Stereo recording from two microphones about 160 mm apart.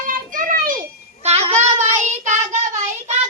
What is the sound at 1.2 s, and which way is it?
Child singing, 40° right (ahead or behind).